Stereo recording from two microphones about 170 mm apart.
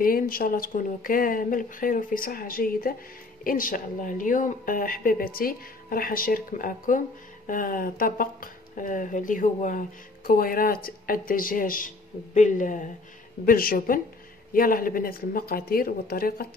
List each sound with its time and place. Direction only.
0.0 s speech: 55° left (ahead or behind)